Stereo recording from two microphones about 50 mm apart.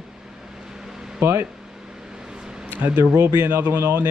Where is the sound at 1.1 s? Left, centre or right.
Right.